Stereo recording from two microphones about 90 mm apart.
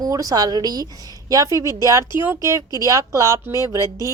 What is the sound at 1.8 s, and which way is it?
Speech, 35° right (ahead or behind).